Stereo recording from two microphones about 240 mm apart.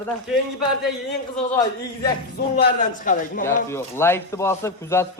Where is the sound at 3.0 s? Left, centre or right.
Left.